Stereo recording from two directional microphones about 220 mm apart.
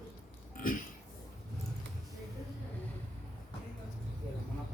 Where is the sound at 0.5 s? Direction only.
40° left (ahead or behind).